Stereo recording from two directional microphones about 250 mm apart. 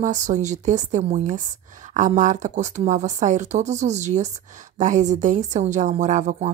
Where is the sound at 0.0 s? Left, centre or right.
Right.